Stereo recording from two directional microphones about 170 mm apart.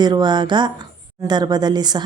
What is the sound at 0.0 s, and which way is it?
Speech, 25° right (ahead or behind).